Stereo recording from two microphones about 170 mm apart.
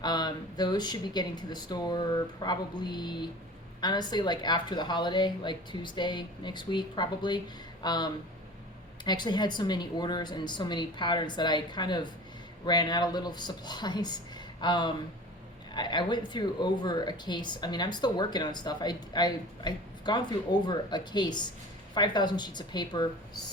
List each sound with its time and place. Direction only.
0.0 s speech: 25° left (ahead or behind)